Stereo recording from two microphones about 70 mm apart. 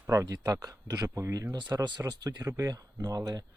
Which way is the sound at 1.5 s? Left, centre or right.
Right.